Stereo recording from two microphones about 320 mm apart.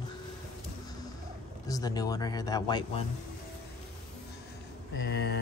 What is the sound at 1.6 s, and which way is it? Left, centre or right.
Speech, centre.